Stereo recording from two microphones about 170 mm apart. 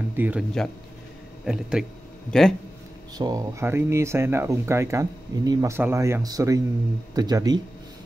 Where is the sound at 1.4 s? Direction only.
5° right (ahead or behind).